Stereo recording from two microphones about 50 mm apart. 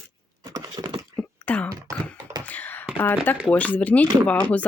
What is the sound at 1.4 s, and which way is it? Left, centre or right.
Computer keyboard, left.